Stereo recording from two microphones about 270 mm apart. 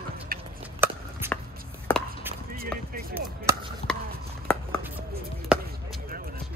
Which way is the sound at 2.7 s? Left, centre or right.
Centre.